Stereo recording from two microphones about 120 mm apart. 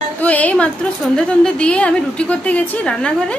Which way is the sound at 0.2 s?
10° left (ahead or behind).